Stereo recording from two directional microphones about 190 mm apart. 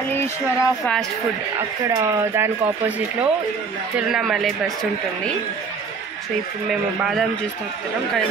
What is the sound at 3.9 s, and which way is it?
Speech, centre (ahead or behind).